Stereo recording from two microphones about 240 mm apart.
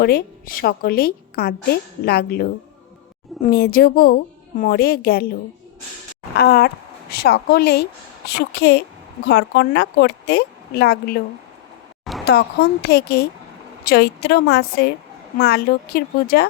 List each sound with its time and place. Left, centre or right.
0.0 s a woman's voice: left
3.5 s a woman's voice: left
12.2 s a woman's voice: left